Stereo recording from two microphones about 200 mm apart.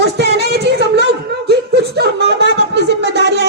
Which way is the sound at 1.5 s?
55° right (ahead or behind).